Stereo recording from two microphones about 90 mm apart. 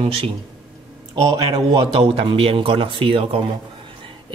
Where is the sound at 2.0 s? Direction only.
90° right.